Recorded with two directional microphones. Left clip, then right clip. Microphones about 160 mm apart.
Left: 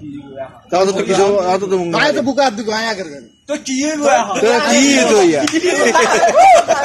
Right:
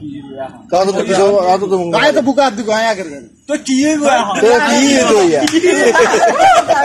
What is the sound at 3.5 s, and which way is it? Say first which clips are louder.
A man's voice: right 5 dB; 30° left (ahead or behind).